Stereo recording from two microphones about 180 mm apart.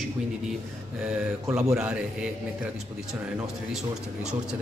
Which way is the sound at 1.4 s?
15° right (ahead or behind).